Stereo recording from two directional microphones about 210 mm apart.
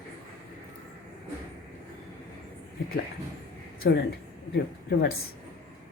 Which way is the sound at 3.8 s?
45° left (ahead or behind).